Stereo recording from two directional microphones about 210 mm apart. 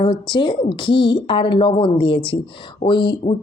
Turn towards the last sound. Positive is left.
turn(degrees=20)  # may be behind; listen again after turning